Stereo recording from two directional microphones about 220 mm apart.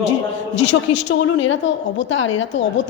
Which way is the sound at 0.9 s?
25° left (ahead or behind).